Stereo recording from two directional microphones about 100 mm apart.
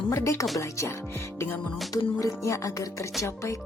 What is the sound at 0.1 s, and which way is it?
Music, 30° left (ahead or behind).